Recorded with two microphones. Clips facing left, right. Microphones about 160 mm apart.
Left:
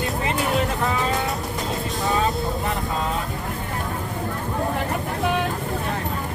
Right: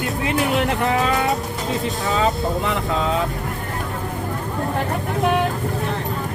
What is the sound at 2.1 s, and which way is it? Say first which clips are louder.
Speech: right 4 dB; 85° right.